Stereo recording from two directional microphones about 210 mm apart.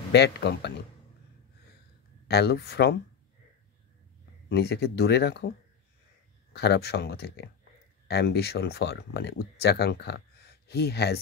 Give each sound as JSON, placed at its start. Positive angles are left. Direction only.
{"t": 0.1, "sound": "speech", "side_deg": 50}
{"t": 2.2, "sound": "speech", "side_deg": 50}
{"t": 4.5, "sound": "speech", "side_deg": 50}
{"t": 6.5, "sound": "speech", "side_deg": 50}